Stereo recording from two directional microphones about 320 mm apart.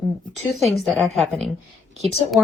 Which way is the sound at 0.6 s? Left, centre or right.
Centre.